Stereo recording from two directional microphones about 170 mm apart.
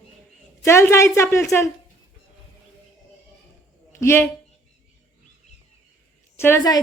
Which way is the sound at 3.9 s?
15° left (ahead or behind).